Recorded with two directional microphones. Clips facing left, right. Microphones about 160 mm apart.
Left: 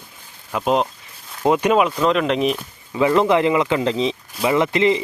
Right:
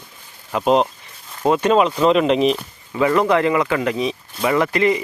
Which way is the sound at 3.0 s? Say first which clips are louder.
Even; 20° left (ahead or behind).